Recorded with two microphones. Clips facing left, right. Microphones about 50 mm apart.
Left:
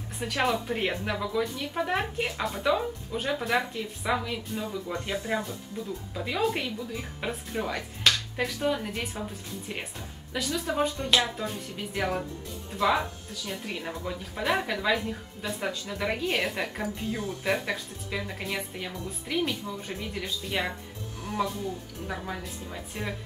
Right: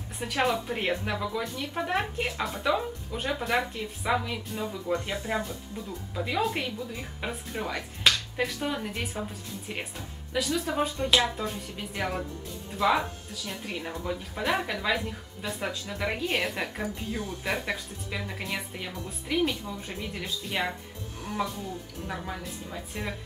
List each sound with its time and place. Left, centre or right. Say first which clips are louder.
0.2 s a woman's voice: even; centre
22.0 s a woman's voice: left 1 dB; centre